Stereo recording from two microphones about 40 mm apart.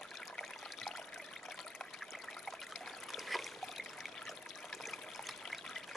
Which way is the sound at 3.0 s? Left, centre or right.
Centre.